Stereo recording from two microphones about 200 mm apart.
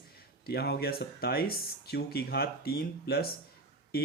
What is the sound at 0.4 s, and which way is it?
Speech, 55° left (ahead or behind).